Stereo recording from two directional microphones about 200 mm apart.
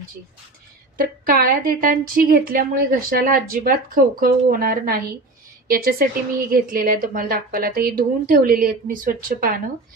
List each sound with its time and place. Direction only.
0.9 s a woman's voice: 45° right (ahead or behind)